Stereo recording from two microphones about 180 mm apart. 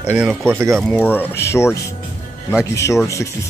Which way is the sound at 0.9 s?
5° left (ahead or behind).